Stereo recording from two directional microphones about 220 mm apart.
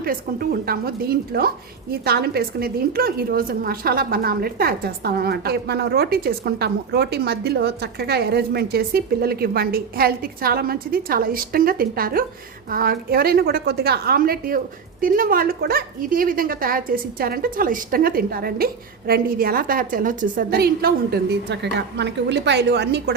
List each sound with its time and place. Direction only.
0.0 s a woman's voice: 45° right (ahead or behind)